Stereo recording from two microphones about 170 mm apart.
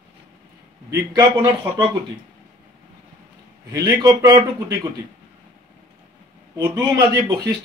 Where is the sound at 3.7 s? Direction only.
20° right (ahead or behind).